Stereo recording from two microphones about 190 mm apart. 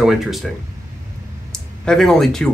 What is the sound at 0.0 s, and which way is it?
Speech, centre (ahead or behind).